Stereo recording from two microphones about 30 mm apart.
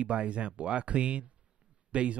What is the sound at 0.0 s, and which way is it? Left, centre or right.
Speech, right.